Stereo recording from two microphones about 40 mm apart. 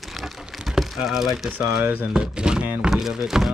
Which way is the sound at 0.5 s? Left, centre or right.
Centre.